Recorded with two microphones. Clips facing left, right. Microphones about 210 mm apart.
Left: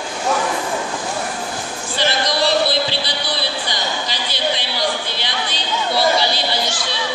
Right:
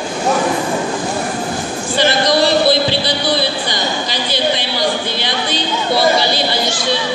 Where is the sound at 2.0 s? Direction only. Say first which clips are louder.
Right 6 dB; 50° right (ahead or behind).